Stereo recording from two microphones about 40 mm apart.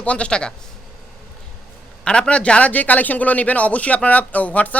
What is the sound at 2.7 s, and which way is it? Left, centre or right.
Speech, left.